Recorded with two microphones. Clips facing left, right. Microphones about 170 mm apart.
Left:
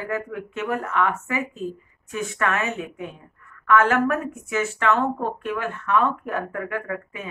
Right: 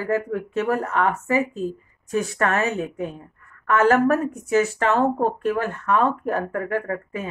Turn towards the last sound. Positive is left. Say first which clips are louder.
# right 4 dB
turn(degrees=-40)  # may be behind; listen again after turning